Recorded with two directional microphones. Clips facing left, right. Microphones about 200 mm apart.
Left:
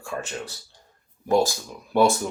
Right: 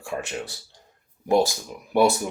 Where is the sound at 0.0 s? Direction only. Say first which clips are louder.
Right 1 dB; 15° right (ahead or behind).